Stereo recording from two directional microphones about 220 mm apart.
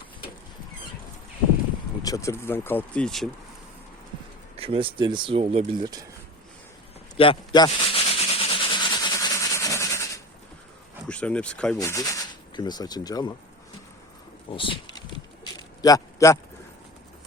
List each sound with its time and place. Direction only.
2.0 s speech: 15° left (ahead or behind)
4.5 s speech: 25° right (ahead or behind)
7.2 s rub: 20° left (ahead or behind)
11.1 s speech: 5° left (ahead or behind)
11.8 s speech: 15° left (ahead or behind)
14.5 s a man's voice: 25° left (ahead or behind)